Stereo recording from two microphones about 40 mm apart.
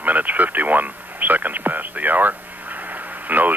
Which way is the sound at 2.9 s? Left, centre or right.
Right.